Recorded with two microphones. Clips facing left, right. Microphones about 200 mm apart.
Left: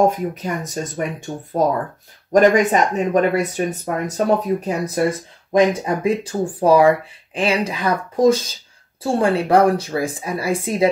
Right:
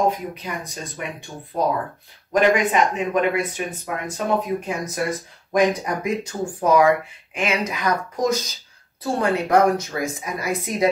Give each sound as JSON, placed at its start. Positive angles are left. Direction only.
{"t": 0.0, "sound": "speech", "side_deg": 45}